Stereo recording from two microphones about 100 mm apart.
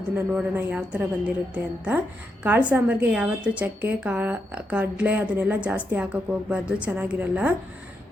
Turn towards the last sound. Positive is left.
turn(degrees=-15)  # may be behind; listen again after turning